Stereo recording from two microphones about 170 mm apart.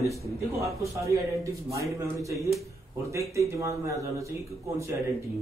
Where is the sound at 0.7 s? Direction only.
20° right (ahead or behind).